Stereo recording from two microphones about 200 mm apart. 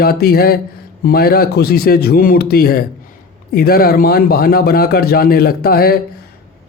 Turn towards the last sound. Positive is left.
turn(degrees=50)  # may be behind; listen again after turning